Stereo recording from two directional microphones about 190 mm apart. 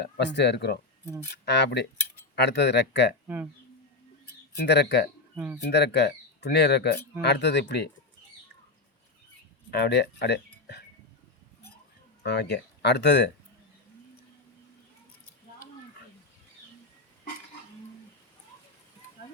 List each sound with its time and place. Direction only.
0.0 s speech: 65° left (ahead or behind)
3.2 s speech: 10° right (ahead or behind)
4.6 s speech: 60° left (ahead or behind)
9.7 s speech: 60° left (ahead or behind)
12.2 s speech: 65° left (ahead or behind)